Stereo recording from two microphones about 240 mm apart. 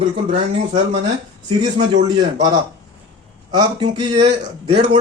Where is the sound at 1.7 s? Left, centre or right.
Right.